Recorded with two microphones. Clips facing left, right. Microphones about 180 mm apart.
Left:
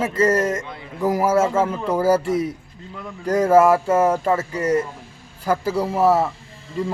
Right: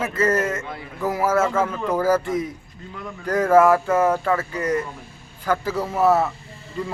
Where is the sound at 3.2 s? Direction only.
10° left (ahead or behind).